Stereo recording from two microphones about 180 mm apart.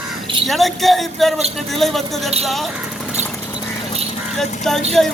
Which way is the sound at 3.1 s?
15° left (ahead or behind).